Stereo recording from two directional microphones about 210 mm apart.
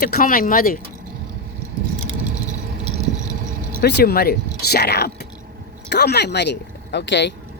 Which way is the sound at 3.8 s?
50° left (ahead or behind).